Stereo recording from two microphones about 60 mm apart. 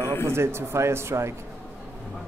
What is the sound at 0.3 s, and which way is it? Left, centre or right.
Speech, right.